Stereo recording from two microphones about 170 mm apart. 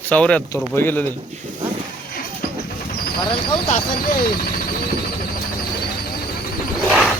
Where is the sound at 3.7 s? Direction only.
45° left (ahead or behind).